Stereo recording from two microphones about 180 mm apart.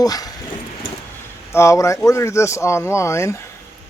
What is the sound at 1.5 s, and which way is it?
Speech, 15° left (ahead or behind).